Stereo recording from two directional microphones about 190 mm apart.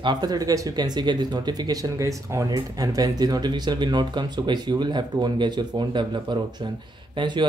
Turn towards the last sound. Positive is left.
turn(degrees=-25)  # may be behind; listen again after turning